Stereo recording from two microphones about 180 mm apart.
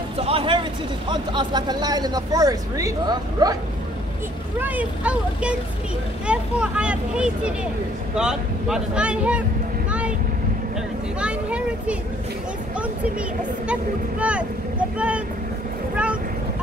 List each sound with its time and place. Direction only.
0.2 s speech: 30° right (ahead or behind)
4.6 s speech: 10° right (ahead or behind)
9.8 s vehicle: 5° right (ahead or behind)
11.1 s speech: 5° right (ahead or behind)
14.2 s speech: 5° right (ahead or behind)